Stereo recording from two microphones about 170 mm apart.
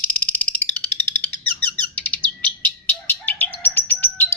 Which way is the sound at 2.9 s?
10° left (ahead or behind).